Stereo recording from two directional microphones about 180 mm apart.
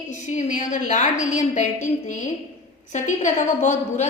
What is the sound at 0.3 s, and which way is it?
A woman's voice, 45° left (ahead or behind).